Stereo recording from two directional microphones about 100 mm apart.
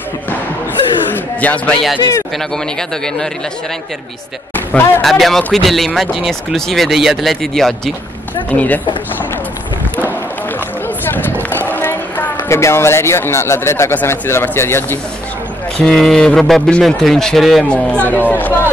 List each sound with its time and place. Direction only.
1.1 s a sound: 15° left (ahead or behind)
4.6 s a sound: 20° left (ahead or behind)
5.0 s speech: 5° left (ahead or behind)
8.5 s speech: 15° left (ahead or behind)
11.1 s music: 20° left (ahead or behind)
11.5 s speech: 20° left (ahead or behind)
15.8 s speech: 5° left (ahead or behind)